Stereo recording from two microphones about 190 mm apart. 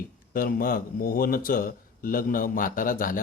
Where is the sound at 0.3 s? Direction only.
50° left (ahead or behind).